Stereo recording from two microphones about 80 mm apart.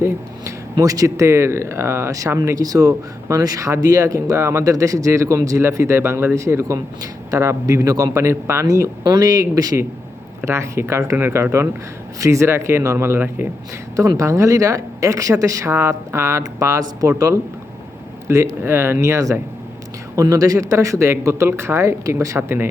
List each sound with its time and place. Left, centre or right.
0.0 s speech: right
6.7 s speech: right
9.0 s speech: right
10.4 s speech: right
14.2 s speech: right